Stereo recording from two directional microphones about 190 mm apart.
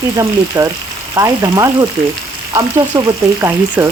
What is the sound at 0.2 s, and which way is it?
A woman's voice, 15° right (ahead or behind).